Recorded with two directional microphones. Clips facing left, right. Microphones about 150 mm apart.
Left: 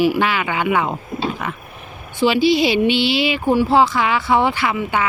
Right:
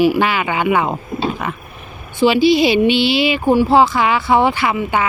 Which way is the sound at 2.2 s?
15° right (ahead or behind).